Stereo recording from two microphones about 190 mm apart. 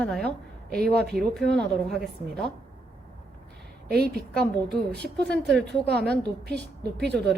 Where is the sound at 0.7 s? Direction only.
55° right (ahead or behind).